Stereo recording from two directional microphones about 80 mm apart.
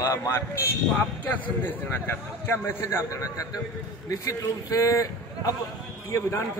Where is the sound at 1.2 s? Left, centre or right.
Left.